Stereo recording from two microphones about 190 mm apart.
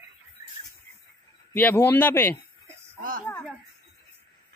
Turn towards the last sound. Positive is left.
turn(degrees=-45)  # may be behind; listen again after turning